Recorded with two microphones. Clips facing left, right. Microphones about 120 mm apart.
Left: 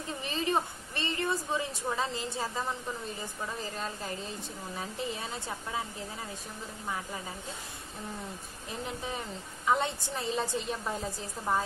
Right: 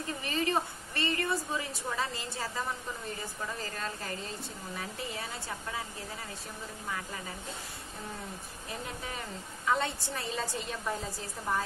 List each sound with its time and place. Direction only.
0.2 s a woman's voice: 20° left (ahead or behind)
3.6 s a woman's voice: 20° left (ahead or behind)
9.7 s a woman's voice: 20° left (ahead or behind)